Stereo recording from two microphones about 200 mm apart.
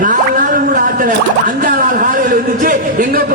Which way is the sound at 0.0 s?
40° right (ahead or behind).